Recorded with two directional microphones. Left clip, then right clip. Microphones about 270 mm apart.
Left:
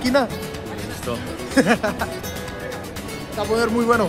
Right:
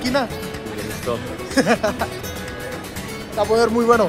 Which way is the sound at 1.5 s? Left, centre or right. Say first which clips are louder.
Even; centre.